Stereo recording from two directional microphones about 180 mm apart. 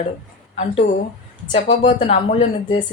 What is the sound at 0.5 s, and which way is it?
Speech, 35° left (ahead or behind).